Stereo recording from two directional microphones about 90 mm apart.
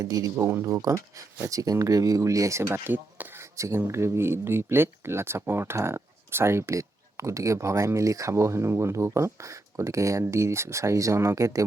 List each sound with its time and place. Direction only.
0.0 s speech: 40° right (ahead or behind)